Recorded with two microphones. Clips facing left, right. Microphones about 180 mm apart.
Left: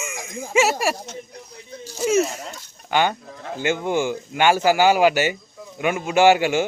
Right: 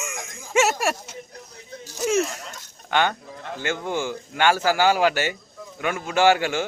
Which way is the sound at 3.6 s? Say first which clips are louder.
Left 5 dB; 15° left (ahead or behind).